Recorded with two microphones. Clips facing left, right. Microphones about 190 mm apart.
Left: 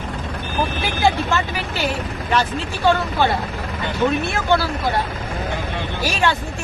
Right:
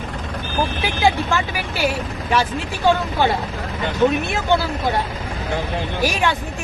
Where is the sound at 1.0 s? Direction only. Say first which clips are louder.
Even; 15° right (ahead or behind).